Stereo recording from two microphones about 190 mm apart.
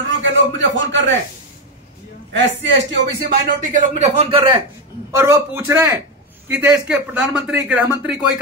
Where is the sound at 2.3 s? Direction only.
75° right (ahead or behind).